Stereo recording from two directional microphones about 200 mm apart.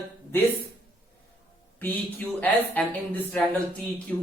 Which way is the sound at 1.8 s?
10° left (ahead or behind).